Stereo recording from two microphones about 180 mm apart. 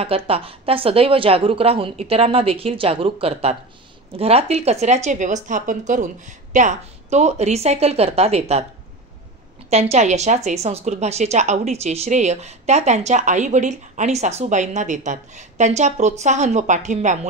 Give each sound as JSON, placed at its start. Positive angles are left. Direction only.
{"t": 0.0, "sound": "speech", "side_deg": -30}
{"t": 9.7, "sound": "speech", "side_deg": -40}